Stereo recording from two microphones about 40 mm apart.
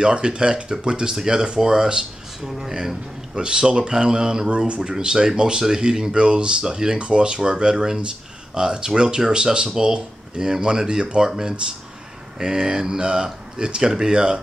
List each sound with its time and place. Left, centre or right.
0.0 s speech: right